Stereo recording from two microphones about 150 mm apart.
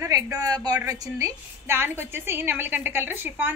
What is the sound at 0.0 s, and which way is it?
A woman's voice, 25° right (ahead or behind).